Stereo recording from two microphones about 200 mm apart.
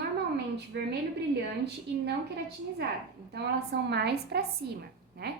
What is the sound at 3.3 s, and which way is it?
A woman's voice, 55° right (ahead or behind).